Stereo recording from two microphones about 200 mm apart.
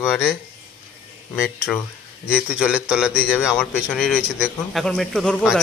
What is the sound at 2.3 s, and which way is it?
A man's voice, 5° right (ahead or behind).